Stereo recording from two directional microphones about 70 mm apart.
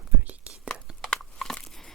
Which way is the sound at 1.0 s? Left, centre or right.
Centre.